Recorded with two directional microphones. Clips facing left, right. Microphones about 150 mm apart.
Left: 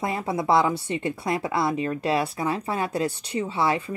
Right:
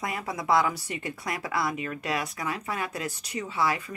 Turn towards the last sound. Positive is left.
turn(degrees=25)  # may be behind; listen again after turning